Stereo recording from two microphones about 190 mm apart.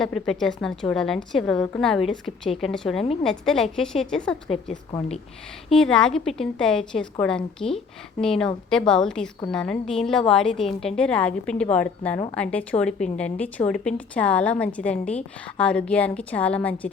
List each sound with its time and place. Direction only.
0.0 s a woman's voice: centre (ahead or behind)
4.9 s speech: 30° left (ahead or behind)
5.7 s a woman's voice: 5° left (ahead or behind)